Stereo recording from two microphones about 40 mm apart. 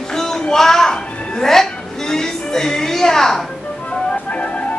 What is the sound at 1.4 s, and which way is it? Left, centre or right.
Speech, centre.